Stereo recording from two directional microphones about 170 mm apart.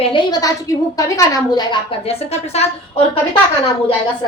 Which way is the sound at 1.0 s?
20° left (ahead or behind).